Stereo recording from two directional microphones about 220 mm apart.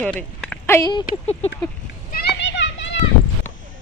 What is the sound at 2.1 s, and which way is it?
Children playing, 50° left (ahead or behind).